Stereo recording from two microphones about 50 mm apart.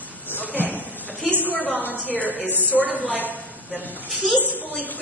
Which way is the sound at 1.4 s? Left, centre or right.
Left.